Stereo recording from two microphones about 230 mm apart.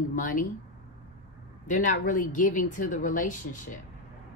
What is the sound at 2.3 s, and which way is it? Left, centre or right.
A woman's voice, left.